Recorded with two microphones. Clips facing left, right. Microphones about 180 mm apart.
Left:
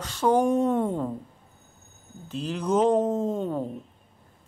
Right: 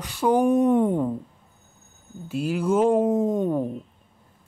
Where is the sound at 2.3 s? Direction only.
10° right (ahead or behind).